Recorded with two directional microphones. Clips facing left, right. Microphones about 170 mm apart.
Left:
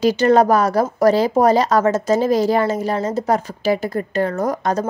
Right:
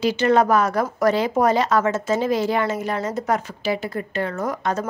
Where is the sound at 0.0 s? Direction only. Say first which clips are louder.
Left 4 dB; 40° left (ahead or behind).